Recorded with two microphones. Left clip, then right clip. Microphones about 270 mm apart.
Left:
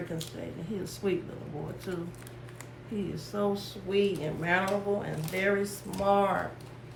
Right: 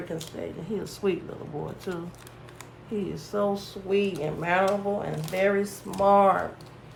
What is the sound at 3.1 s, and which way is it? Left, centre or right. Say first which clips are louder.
Speech: right 4 dB; right.